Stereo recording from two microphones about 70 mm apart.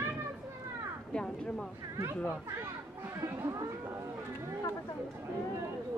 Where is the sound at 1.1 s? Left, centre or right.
Centre.